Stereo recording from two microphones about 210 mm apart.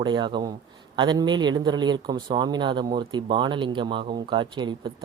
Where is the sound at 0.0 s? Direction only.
20° right (ahead or behind).